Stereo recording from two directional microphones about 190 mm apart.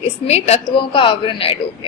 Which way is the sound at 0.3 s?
35° left (ahead or behind).